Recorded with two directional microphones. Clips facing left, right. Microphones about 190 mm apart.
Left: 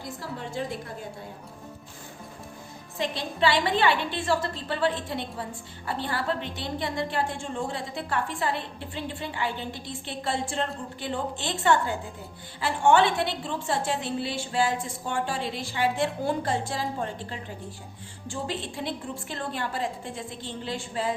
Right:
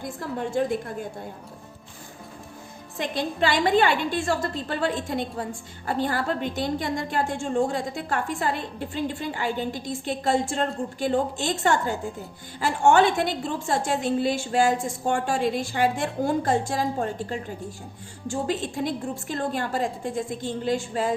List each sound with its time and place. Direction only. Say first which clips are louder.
0.0 s a woman's voice: right 6 dB; 50° right (ahead or behind)
3.0 s a woman's voice: right 1 dB; 45° right (ahead or behind)